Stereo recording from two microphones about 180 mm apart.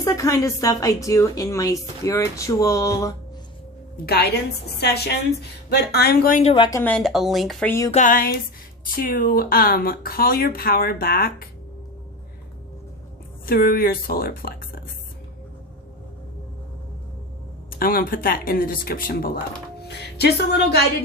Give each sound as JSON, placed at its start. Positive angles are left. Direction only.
{"t": 0.0, "sound": "a woman's voice", "side_deg": 15}
{"t": 3.9, "sound": "speech", "side_deg": 60}
{"t": 6.4, "sound": "a woman's voice", "side_deg": 35}
{"t": 6.7, "sound": "a woman's voice", "side_deg": 15}
{"t": 6.9, "sound": "speech", "side_deg": 0}
{"t": 7.9, "sound": "speech", "side_deg": 45}
{"t": 13.4, "sound": "speech", "side_deg": 55}
{"t": 17.7, "sound": "speech", "side_deg": 55}